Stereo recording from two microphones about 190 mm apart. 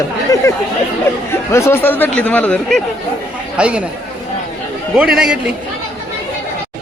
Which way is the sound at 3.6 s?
5° right (ahead or behind).